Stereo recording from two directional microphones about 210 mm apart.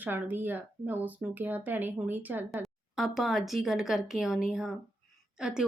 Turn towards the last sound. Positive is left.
turn(degrees=-5)  # may be behind; listen again after turning